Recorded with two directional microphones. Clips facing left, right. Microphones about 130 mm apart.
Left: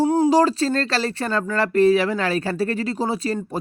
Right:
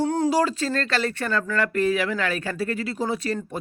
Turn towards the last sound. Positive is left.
turn(degrees=30)  # may be behind; listen again after turning